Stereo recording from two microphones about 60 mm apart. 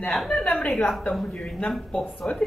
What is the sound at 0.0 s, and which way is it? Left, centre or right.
Speech, centre.